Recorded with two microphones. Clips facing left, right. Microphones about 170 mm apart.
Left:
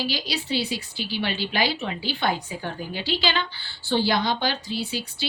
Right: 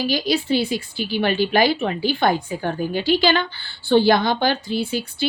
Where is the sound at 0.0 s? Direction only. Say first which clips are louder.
Right 8 dB; 50° right (ahead or behind).